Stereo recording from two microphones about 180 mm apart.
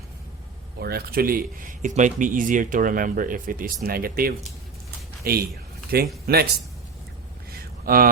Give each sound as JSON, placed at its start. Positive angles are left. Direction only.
{"t": 0.8, "sound": "speech", "side_deg": -60}
{"t": 7.9, "sound": "speech", "side_deg": -50}